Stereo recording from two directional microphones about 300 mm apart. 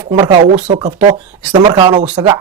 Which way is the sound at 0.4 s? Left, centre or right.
Right.